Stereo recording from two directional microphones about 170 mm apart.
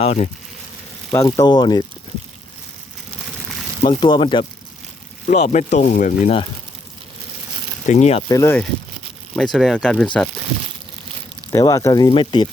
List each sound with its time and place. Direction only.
0.0 s speech: 45° left (ahead or behind)
1.1 s speech: 20° left (ahead or behind)
3.8 s speech: 25° left (ahead or behind)
5.3 s speech: 45° left (ahead or behind)
7.9 s speech: 40° left (ahead or behind)
8.3 s speech: 15° left (ahead or behind)
9.3 s speech: 5° left (ahead or behind)
11.5 s speech: 20° left (ahead or behind)